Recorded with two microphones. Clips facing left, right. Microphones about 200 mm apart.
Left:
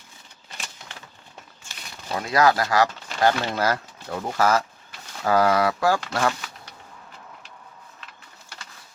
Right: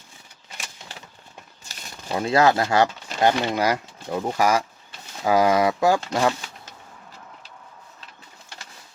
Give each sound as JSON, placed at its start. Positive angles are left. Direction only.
{"t": 1.7, "sound": "crumpling", "side_deg": -40}
{"t": 2.0, "sound": "speech", "side_deg": -25}